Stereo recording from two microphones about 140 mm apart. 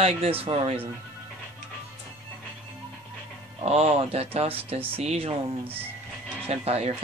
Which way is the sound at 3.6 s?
45° right (ahead or behind).